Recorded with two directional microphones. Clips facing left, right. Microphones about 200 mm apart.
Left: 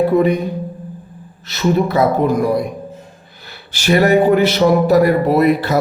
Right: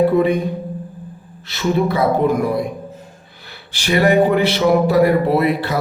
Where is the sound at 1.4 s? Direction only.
40° left (ahead or behind).